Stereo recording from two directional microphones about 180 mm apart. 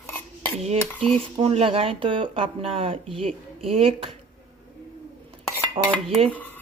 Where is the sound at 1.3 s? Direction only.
30° right (ahead or behind).